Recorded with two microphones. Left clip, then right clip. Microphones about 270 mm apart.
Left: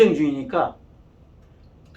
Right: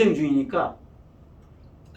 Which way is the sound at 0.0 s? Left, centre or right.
Centre.